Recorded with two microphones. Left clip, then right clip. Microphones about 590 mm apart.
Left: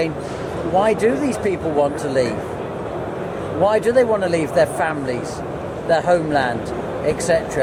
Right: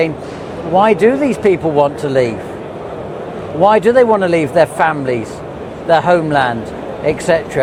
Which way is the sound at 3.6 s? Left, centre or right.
Right.